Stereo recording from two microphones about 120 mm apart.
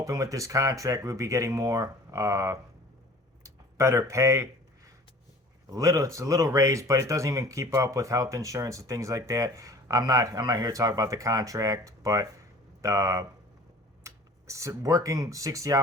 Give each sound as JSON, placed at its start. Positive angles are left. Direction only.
{"t": 0.0, "sound": "speech", "side_deg": -30}
{"t": 5.7, "sound": "speech", "side_deg": -25}